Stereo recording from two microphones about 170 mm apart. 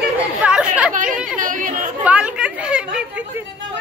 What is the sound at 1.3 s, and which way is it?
Chatter, 50° right (ahead or behind).